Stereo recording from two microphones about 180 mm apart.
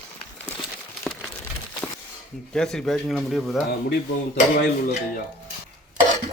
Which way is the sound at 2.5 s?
5° left (ahead or behind).